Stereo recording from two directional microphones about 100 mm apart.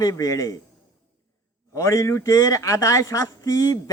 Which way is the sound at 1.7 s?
35° left (ahead or behind).